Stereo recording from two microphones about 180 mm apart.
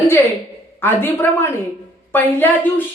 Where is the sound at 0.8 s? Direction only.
10° left (ahead or behind).